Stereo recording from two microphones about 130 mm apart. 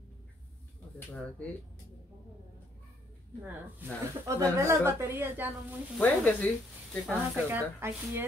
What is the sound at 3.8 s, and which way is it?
Speech, 15° right (ahead or behind).